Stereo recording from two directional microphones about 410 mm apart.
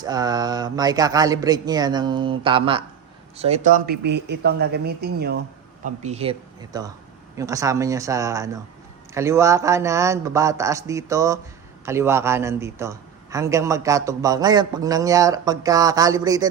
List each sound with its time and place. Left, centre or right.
0.0 s a man's voice: centre